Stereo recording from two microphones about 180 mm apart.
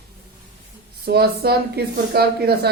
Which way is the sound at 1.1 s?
60° right (ahead or behind).